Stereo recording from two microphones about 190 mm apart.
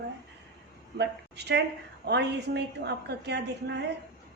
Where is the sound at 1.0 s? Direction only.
65° right (ahead or behind).